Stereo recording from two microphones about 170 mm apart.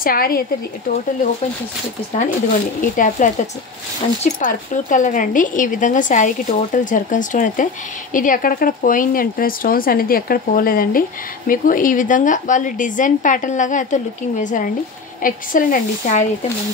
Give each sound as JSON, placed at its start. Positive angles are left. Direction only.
{"t": 0.0, "sound": "speech", "side_deg": 60}
{"t": 2.8, "sound": "speech", "side_deg": 50}